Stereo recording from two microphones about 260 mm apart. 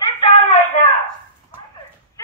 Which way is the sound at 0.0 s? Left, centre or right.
Centre.